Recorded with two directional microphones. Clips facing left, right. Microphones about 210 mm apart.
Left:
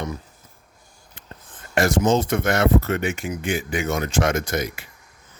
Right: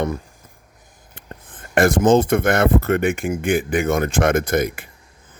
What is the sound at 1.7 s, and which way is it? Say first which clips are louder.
Speech: right 5 dB; 55° right (ahead or behind).